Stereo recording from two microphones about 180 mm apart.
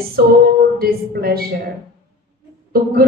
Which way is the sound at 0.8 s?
55° right (ahead or behind).